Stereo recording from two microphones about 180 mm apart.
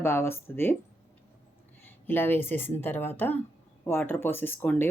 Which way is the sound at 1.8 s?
10° left (ahead or behind).